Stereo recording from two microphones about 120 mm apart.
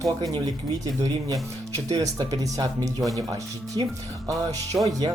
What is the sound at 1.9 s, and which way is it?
Speech, 30° right (ahead or behind).